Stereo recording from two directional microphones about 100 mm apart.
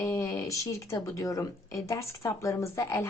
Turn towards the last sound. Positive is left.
turn(degrees=30)  # may be behind; listen again after turning